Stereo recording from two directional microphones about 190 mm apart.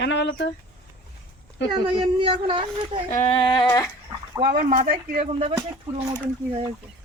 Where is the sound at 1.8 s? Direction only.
25° right (ahead or behind).